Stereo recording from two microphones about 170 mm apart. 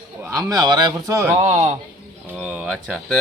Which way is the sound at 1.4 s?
40° right (ahead or behind).